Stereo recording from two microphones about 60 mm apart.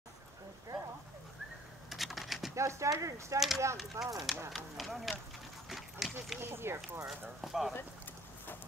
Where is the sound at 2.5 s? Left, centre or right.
Right.